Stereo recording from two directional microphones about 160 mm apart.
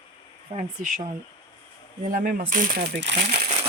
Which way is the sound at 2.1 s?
60° right (ahead or behind).